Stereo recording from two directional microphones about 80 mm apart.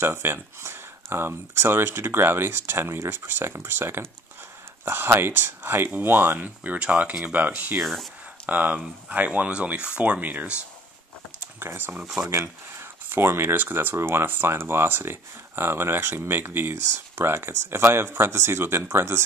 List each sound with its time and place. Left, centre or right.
0.0 s speech: right
7.8 s speech: centre
8.5 s speech: right
11.6 s speech: right
12.0 s speech: centre
13.1 s speech: right